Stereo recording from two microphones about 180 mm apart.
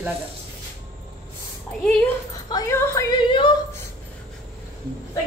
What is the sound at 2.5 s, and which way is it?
Speech, 15° left (ahead or behind).